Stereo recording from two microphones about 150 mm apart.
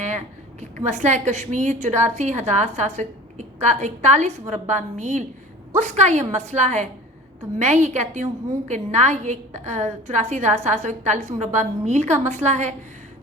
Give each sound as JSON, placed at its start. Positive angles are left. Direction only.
{"t": 0.9, "sound": "a woman's voice", "side_deg": -50}